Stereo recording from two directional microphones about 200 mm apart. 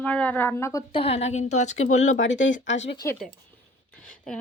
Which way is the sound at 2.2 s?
65° left (ahead or behind).